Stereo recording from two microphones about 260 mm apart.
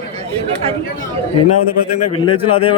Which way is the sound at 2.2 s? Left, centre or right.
Left.